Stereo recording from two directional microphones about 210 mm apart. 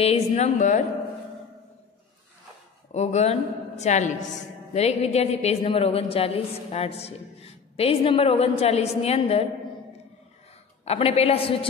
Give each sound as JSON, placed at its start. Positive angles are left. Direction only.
{"t": 0.0, "sound": "a woman's voice", "side_deg": 30}
{"t": 2.9, "sound": "a woman's voice", "side_deg": 30}
{"t": 10.9, "sound": "a woman's voice", "side_deg": 30}